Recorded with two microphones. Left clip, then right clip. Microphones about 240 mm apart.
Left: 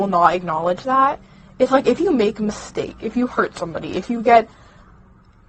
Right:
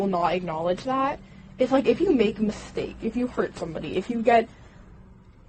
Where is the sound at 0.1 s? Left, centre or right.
Left.